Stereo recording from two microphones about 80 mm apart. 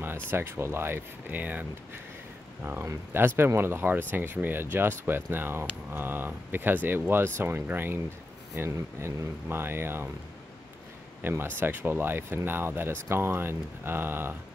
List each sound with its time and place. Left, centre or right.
0.0 s speech: right
11.2 s speech: right